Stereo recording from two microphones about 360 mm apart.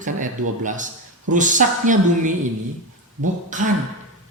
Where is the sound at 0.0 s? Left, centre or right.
Right.